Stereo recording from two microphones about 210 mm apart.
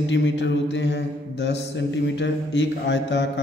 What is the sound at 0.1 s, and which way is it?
Mantra, 60° left (ahead or behind).